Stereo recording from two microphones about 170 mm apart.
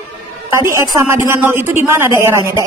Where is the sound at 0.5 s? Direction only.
15° right (ahead or behind).